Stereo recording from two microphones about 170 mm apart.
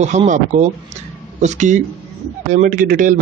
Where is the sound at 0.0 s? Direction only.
45° right (ahead or behind).